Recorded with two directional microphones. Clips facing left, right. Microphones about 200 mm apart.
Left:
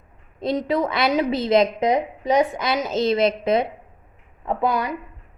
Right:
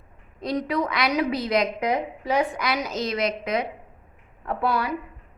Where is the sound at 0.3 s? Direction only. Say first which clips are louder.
Left 3 dB; 25° left (ahead or behind).